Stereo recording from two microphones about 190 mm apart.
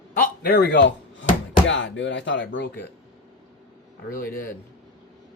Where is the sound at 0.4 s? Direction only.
55° left (ahead or behind).